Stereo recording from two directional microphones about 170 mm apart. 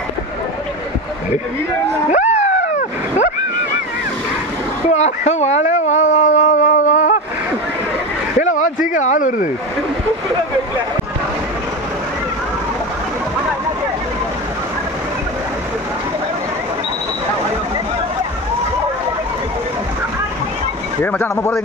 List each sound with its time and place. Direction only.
2.0 s a sound: 45° left (ahead or behind)
4.8 s speech: 45° left (ahead or behind)
8.4 s speech: 45° left (ahead or behind)
21.0 s speech: 10° left (ahead or behind)